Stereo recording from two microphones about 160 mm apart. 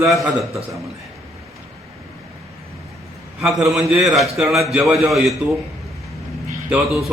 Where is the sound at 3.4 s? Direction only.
Centre (ahead or behind).